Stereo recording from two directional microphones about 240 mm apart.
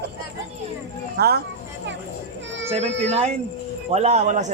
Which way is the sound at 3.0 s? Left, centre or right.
Right.